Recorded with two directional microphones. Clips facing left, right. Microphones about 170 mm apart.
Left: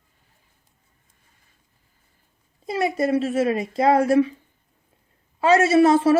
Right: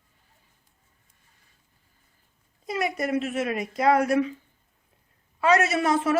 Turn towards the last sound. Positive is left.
turn(degrees=30)  # may be behind; listen again after turning